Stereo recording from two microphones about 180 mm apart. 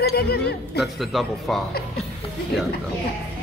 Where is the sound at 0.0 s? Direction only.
60° left (ahead or behind).